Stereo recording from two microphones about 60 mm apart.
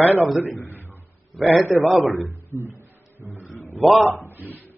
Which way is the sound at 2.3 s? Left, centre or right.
Right.